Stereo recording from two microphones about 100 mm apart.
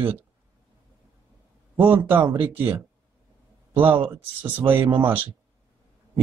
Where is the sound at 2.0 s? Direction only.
20° right (ahead or behind).